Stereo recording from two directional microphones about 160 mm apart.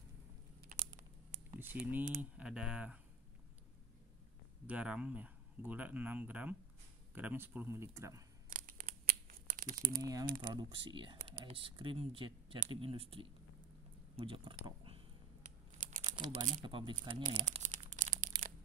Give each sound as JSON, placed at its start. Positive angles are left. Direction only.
{"t": 1.5, "sound": "typing", "side_deg": -15}
{"t": 2.3, "sound": "speech", "side_deg": -5}
{"t": 4.6, "sound": "speech", "side_deg": -10}
{"t": 8.5, "sound": "crumpling", "side_deg": -60}
{"t": 10.4, "sound": "speech", "side_deg": -25}
{"t": 16.0, "sound": "a sound", "side_deg": -45}
{"t": 16.6, "sound": "speech", "side_deg": -30}
{"t": 17.2, "sound": "crumpling", "side_deg": -50}